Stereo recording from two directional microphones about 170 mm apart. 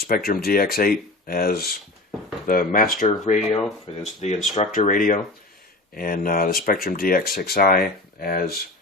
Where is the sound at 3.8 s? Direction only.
40° left (ahead or behind).